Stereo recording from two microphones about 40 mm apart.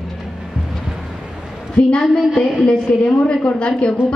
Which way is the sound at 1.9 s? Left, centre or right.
Left.